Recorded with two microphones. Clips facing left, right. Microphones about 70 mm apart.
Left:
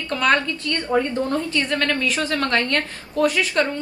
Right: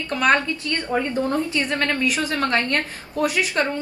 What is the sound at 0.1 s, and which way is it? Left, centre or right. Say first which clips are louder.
A woman's voice: even; centre.